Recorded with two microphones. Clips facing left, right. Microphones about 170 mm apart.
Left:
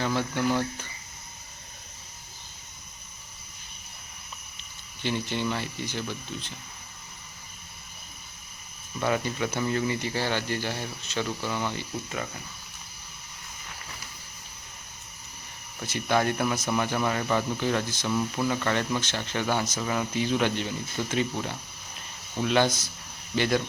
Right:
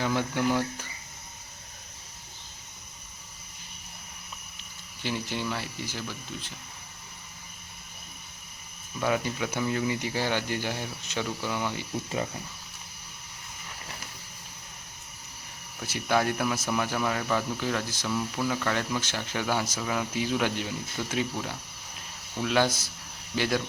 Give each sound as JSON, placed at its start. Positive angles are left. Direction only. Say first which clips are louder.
{"t": 0.0, "sound": "speech", "louder": "even", "side_deg": -15}
{"t": 5.0, "sound": "speech", "louder": "left 3 dB", "side_deg": -5}
{"t": 9.0, "sound": "speech", "louder": "left 1 dB", "side_deg": -5}
{"t": 11.3, "sound": "speech", "louder": "left 1 dB", "side_deg": -5}
{"t": 12.0, "sound": "speech", "louder": "right 3 dB", "side_deg": -25}
{"t": 15.8, "sound": "speech", "louder": "left 1 dB", "side_deg": -5}